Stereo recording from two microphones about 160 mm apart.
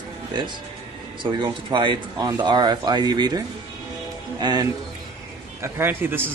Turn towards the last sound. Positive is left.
turn(degrees=-15)  # may be behind; listen again after turning